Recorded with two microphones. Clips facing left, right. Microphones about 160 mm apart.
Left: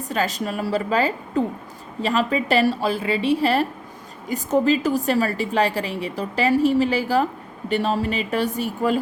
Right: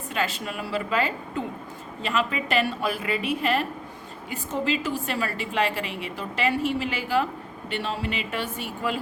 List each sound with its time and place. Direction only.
0.1 s a woman's voice: 40° left (ahead or behind)